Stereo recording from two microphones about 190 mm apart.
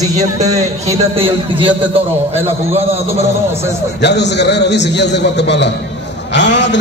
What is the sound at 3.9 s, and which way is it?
A man's voice, 65° left (ahead or behind).